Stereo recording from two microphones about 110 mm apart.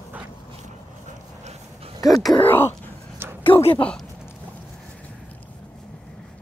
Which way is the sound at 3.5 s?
55° left (ahead or behind).